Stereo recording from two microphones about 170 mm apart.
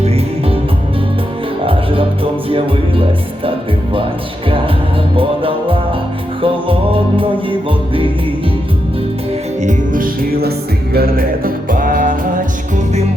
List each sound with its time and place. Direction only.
0.0 s music: 35° right (ahead or behind)
1.6 s music: 30° right (ahead or behind)
5.1 s music: 30° right (ahead or behind)
9.6 s music: 50° right (ahead or behind)